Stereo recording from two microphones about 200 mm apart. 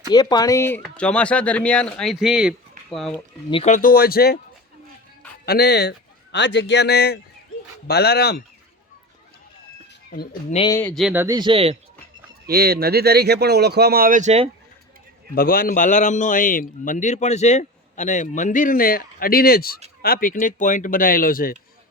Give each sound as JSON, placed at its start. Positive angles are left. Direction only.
{"t": 0.1, "sound": "speech", "side_deg": 20}
{"t": 3.5, "sound": "speech", "side_deg": 35}
{"t": 5.5, "sound": "speech", "side_deg": 55}
{"t": 10.7, "sound": "speech", "side_deg": 10}
{"t": 10.9, "sound": "a man's voice", "side_deg": -5}
{"t": 11.3, "sound": "speech", "side_deg": -25}
{"t": 12.5, "sound": "speech", "side_deg": -50}
{"t": 15.4, "sound": "a man's voice", "side_deg": 45}